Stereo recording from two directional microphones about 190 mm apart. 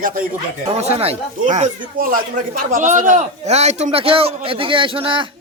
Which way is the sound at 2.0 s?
45° right (ahead or behind).